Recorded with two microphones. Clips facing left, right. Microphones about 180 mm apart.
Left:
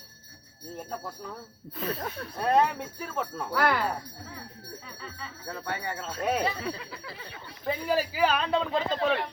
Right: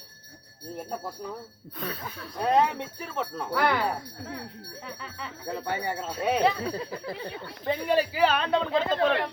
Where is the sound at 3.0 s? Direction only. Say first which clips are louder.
Even; 5° left (ahead or behind).